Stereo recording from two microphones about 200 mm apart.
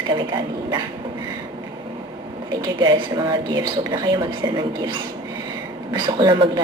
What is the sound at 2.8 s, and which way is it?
A woman's voice, 20° right (ahead or behind).